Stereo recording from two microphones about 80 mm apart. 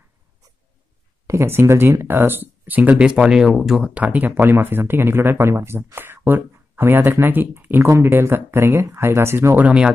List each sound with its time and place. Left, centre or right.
1.2 s speech: right
3.1 s speech: centre
3.9 s speech: centre; by 9.6 s right
9.6 s speech: centre